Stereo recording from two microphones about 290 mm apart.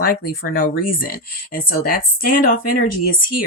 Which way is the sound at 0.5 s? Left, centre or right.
Left.